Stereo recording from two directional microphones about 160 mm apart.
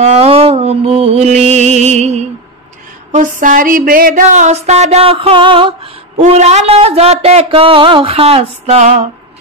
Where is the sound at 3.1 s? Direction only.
55° right (ahead or behind); by 5.8 s 35° right (ahead or behind).